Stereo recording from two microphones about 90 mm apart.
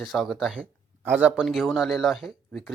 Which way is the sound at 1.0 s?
20° right (ahead or behind).